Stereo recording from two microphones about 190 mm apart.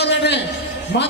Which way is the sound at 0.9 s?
60° left (ahead or behind).